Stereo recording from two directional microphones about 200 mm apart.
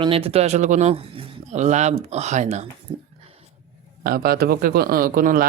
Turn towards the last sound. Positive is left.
turn(degrees=-45)  # may be behind; listen again after turning